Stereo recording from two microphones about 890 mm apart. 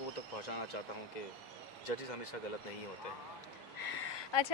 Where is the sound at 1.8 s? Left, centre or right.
Left.